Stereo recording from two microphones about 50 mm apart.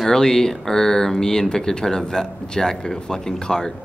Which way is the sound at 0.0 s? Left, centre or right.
Centre.